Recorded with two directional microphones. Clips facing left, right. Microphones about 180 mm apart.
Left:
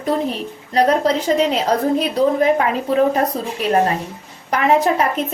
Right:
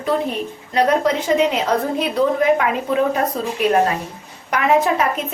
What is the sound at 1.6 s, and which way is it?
A woman's voice, 35° left (ahead or behind).